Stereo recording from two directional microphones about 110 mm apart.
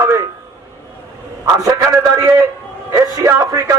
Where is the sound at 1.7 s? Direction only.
30° right (ahead or behind).